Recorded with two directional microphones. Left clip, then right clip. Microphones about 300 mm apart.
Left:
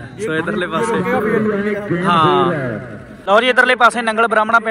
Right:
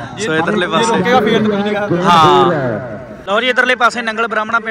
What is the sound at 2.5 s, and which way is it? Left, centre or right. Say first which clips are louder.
Speech: right 5 dB; left.